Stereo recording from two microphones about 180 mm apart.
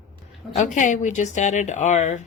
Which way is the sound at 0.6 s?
40° left (ahead or behind).